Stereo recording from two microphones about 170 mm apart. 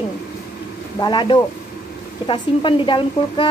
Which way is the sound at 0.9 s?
25° left (ahead or behind).